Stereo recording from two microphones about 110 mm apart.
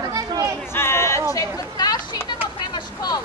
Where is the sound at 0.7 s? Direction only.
20° left (ahead or behind); by 2.2 s 40° left (ahead or behind).